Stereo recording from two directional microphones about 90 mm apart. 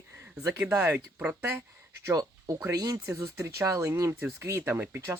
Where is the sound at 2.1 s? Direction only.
40° right (ahead or behind).